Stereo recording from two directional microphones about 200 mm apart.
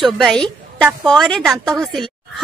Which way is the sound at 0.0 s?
Centre (ahead or behind).